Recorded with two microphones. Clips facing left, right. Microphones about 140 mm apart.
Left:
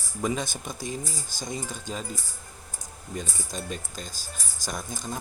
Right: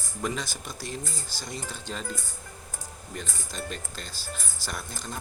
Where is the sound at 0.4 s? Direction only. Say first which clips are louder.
Left 3 dB; 50° left (ahead or behind).